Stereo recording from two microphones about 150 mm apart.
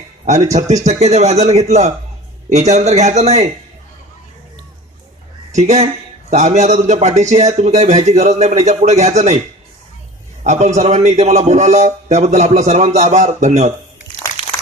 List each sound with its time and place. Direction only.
0.3 s speech: 50° right (ahead or behind)
5.5 s speech: 50° right (ahead or behind)
10.4 s a man's voice: 50° right (ahead or behind)